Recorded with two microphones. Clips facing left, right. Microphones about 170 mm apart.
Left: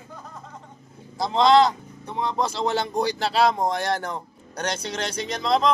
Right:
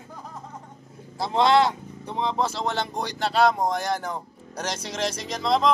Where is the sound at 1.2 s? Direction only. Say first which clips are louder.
Left 2 dB; 10° right (ahead or behind).